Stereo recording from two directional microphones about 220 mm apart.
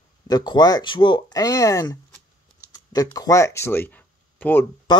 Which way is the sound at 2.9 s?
15° left (ahead or behind).